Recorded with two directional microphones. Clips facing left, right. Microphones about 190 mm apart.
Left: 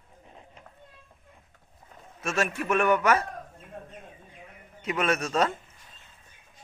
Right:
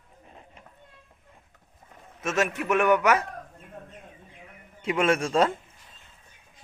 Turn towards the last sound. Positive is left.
turn(degrees=-30)  # may be behind; listen again after turning